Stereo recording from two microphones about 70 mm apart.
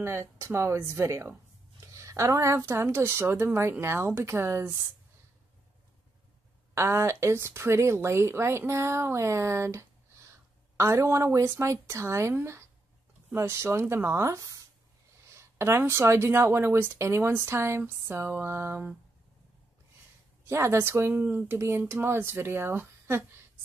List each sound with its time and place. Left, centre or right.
0.0 s speech: right
6.7 s a woman's voice: right
20.4 s speech: right
21.1 s speech: right
21.5 s speech: right